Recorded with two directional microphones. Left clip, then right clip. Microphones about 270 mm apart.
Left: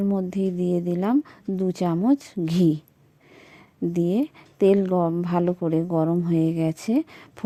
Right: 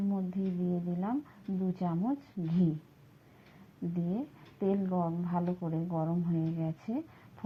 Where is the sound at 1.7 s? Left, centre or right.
Left.